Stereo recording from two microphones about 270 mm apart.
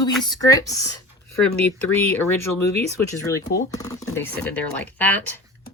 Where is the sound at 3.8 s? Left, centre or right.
Centre.